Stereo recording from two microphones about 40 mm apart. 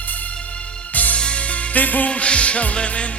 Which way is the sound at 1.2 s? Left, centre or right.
Left.